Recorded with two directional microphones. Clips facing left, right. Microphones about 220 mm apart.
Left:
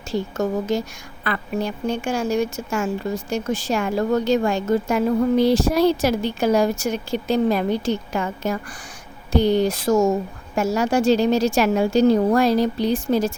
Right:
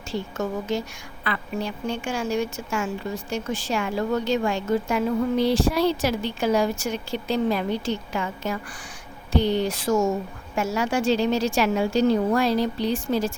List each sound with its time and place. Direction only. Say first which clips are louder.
0.1 s a woman's voice: left 5 dB; 40° left (ahead or behind)